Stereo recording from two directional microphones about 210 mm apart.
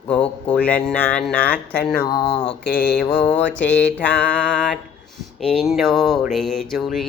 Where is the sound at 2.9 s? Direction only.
5° left (ahead or behind).